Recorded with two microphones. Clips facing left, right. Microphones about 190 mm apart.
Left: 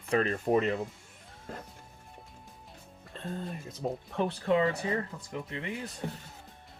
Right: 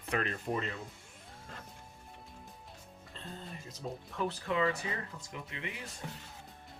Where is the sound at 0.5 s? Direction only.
65° left (ahead or behind).